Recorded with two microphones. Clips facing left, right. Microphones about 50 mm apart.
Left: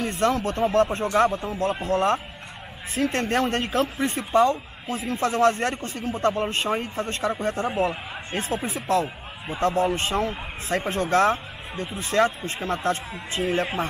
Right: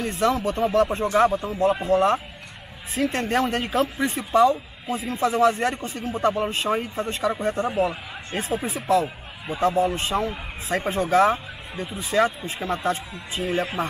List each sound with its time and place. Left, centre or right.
0.0 s speech: centre